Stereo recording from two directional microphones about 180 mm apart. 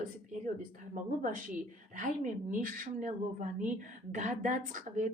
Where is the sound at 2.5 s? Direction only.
50° right (ahead or behind).